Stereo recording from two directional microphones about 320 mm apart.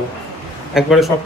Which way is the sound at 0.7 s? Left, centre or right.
Centre.